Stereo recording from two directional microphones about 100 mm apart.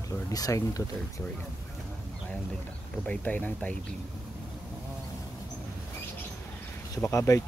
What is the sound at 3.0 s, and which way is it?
Speech, 15° left (ahead or behind).